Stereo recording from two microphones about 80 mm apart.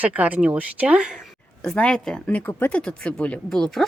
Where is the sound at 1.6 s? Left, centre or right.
Centre.